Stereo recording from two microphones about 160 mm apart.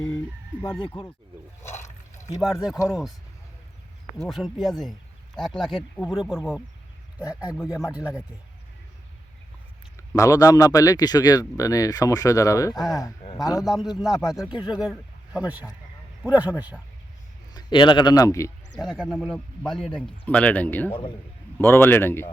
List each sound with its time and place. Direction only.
1.6 s water: 15° left (ahead or behind)
2.4 s speech: 5° right (ahead or behind)
4.2 s speech: centre (ahead or behind)
7.6 s a man's voice: 5° right (ahead or behind)
10.2 s speech: 20° left (ahead or behind)
13.7 s a man's voice: centre (ahead or behind)
17.5 s a man's voice: 25° left (ahead or behind)
18.8 s speech: centre (ahead or behind)
20.9 s speech: 30° left (ahead or behind)
21.6 s a man's voice: 15° left (ahead or behind)